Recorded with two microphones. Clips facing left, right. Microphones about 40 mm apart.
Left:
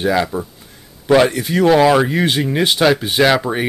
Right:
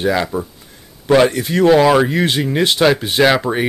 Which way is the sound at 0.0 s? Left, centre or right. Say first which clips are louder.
Even; centre.